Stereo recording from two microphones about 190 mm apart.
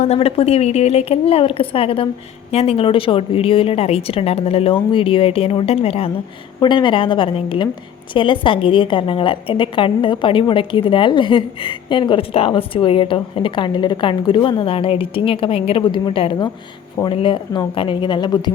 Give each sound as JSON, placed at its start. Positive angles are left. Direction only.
{"t": 0.0, "sound": "a woman's voice", "side_deg": 35}